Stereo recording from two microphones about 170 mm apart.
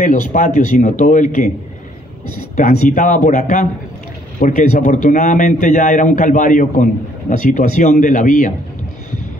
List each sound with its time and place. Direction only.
0.0 s a man's voice: 50° left (ahead or behind)
2.5 s a man's voice: 45° left (ahead or behind)